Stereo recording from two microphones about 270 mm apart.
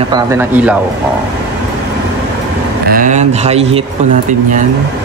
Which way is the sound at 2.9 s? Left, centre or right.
Right.